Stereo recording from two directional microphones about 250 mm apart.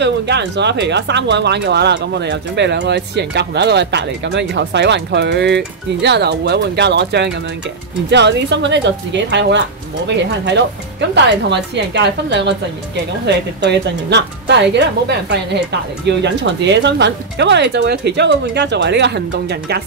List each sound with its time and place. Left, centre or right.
0.0 s speech: right